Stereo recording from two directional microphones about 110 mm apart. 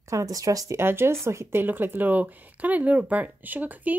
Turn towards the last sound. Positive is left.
turn(degrees=-15)  # may be behind; listen again after turning